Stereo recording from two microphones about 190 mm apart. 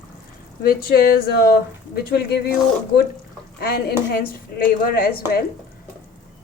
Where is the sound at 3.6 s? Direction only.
55° left (ahead or behind).